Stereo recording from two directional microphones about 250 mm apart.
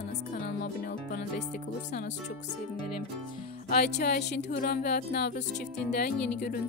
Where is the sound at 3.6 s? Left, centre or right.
Left.